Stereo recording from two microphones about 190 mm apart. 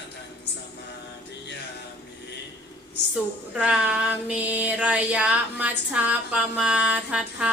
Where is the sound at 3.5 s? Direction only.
5° right (ahead or behind).